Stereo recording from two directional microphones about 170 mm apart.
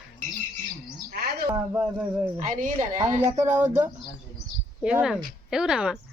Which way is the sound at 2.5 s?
45° right (ahead or behind).